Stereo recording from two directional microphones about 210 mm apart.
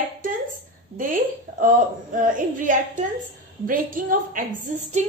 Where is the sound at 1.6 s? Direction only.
40° right (ahead or behind).